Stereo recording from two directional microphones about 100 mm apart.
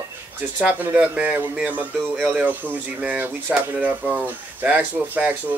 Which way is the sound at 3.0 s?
15° right (ahead or behind).